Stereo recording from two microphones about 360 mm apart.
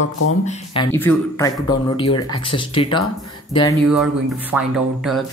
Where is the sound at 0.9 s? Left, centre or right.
Centre.